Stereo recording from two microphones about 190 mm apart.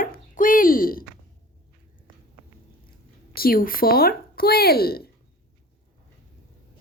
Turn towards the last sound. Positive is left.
turn(degrees=55)  # may be behind; listen again after turning